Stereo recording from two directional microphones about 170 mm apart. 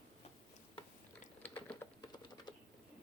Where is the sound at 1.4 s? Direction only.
10° left (ahead or behind).